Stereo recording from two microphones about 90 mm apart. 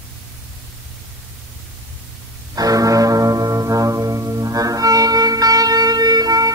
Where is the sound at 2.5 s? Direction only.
40° right (ahead or behind).